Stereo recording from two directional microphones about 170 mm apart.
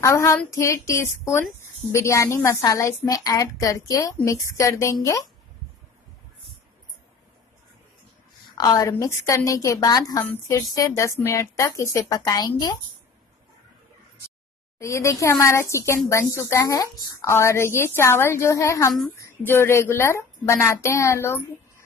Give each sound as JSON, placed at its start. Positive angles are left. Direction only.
{"t": 0.0, "sound": "a woman's voice", "side_deg": 15}
{"t": 8.5, "sound": "a woman's voice", "side_deg": 20}
{"t": 14.8, "sound": "a woman's voice", "side_deg": 15}